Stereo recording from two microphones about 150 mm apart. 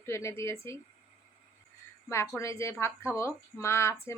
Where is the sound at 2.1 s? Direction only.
20° left (ahead or behind).